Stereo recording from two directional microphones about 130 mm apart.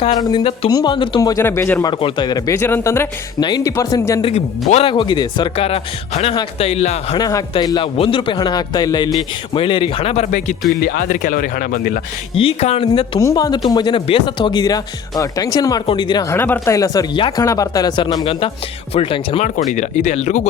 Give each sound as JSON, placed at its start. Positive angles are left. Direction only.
{"t": 0.2, "sound": "speech", "side_deg": 35}
{"t": 1.2, "sound": "speech", "side_deg": 25}
{"t": 1.8, "sound": "speech", "side_deg": 40}
{"t": 2.5, "sound": "speech", "side_deg": 20}
{"t": 3.4, "sound": "speech", "side_deg": 30}
{"t": 4.2, "sound": "a man's voice", "side_deg": 50}
{"t": 5.5, "sound": "a man's voice", "side_deg": 50}
{"t": 7.2, "sound": "a man's voice", "side_deg": 25}
{"t": 12.3, "sound": "a man's voice", "side_deg": 45}
{"t": 13.1, "sound": "speech", "side_deg": 25}
{"t": 16.3, "sound": "speech", "side_deg": 20}
{"t": 18.3, "sound": "a man's voice", "side_deg": 45}
{"t": 19.5, "sound": "speech", "side_deg": 70}